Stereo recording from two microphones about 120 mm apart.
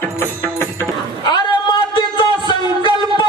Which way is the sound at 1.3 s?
40° left (ahead or behind).